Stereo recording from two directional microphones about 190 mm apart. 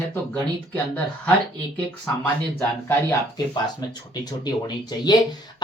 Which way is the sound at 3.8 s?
20° left (ahead or behind).